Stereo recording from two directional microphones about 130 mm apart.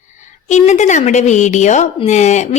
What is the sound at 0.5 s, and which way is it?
Speech, 65° left (ahead or behind).